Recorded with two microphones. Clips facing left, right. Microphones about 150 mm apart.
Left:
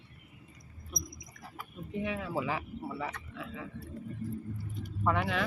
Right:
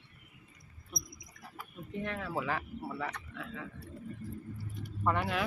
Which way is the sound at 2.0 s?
5° left (ahead or behind).